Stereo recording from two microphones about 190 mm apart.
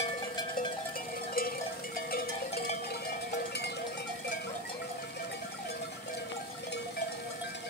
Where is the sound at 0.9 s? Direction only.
50° left (ahead or behind).